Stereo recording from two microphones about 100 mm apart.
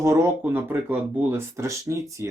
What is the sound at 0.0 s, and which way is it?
Speech, 30° right (ahead or behind).